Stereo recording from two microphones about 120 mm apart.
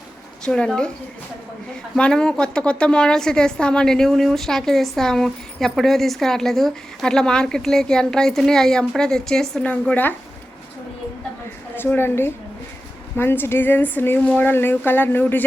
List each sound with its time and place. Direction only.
0.4 s speech: 5° left (ahead or behind)
2.0 s a woman's voice: 5° left (ahead or behind)
11.8 s a woman's voice: 20° left (ahead or behind)